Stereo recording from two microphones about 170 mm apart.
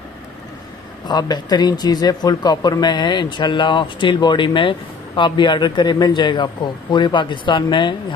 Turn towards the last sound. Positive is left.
turn(degrees=30)  # may be behind; listen again after turning